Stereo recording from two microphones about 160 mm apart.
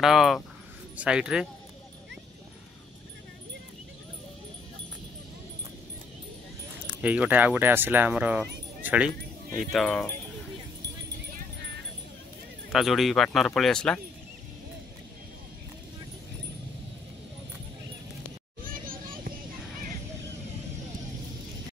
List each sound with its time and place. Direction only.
0.0 s speech: centre (ahead or behind)
7.0 s speech: 10° right (ahead or behind)
12.7 s speech: centre (ahead or behind)
18.6 s children playing: 60° right (ahead or behind)